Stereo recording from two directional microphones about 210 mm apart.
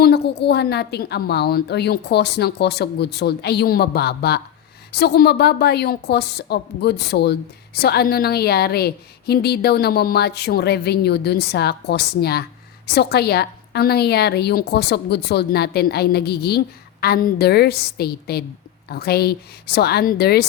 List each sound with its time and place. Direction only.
0.0 s a woman's voice: 50° left (ahead or behind)